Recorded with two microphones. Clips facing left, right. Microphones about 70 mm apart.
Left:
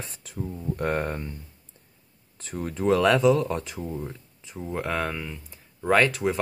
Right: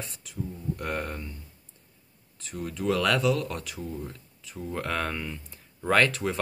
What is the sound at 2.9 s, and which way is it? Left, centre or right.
Speech, left.